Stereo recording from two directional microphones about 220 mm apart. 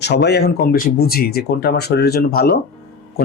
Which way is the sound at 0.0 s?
50° left (ahead or behind).